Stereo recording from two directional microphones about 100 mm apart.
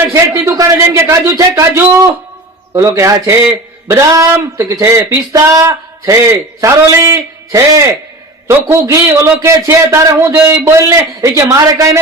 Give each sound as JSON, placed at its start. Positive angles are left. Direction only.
{"t": 0.0, "sound": "a man's voice", "side_deg": -25}